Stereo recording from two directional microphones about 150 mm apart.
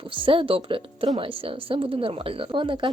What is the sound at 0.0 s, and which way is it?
A woman's voice, 35° right (ahead or behind).